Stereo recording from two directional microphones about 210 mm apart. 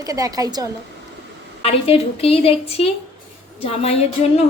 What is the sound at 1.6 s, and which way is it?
A woman's voice, 30° left (ahead or behind).